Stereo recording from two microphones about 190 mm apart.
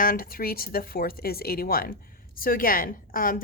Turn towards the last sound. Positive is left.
turn(degrees=45)  # may be behind; listen again after turning